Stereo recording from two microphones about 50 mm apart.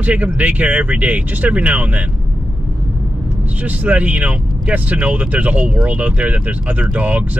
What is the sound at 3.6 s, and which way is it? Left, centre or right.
Speech, right.